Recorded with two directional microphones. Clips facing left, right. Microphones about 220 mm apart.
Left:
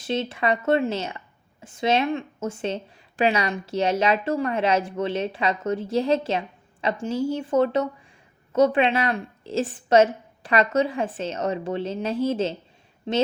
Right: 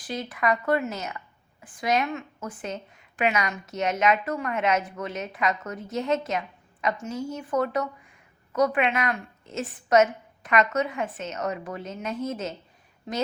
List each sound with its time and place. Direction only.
0.0 s a woman's voice: 25° left (ahead or behind)